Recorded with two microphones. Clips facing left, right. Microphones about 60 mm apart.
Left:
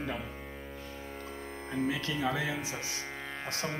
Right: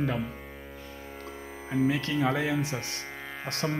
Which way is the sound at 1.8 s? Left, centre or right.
Right.